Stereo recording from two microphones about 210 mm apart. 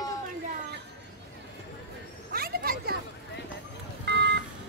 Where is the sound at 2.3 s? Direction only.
45° right (ahead or behind).